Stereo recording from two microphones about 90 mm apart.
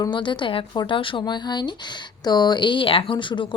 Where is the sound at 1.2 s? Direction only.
55° left (ahead or behind).